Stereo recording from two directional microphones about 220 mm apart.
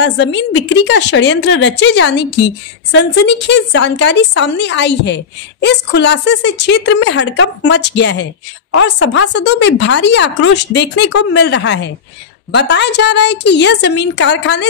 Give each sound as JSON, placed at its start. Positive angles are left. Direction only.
{"t": 0.0, "sound": "speech", "side_deg": 55}